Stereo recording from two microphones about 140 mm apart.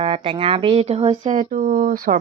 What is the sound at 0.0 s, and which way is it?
Speech, 40° right (ahead or behind).